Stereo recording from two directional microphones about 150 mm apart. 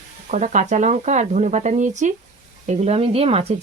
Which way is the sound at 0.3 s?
55° right (ahead or behind).